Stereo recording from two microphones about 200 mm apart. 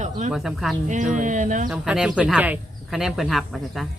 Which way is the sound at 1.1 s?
40° right (ahead or behind).